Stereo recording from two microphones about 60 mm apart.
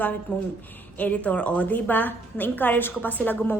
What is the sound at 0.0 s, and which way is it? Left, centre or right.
A woman's voice, left.